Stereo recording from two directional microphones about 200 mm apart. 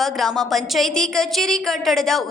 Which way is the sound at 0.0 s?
Centre (ahead or behind).